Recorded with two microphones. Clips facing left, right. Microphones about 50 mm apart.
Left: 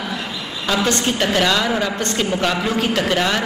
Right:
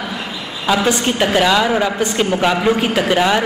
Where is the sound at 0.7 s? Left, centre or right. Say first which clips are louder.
Right 3 dB; centre.